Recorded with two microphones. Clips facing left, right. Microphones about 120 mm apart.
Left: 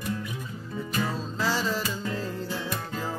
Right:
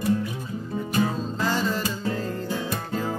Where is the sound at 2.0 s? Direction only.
50° right (ahead or behind).